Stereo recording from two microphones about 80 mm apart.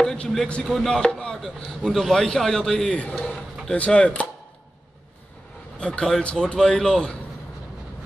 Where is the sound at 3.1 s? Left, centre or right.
Centre.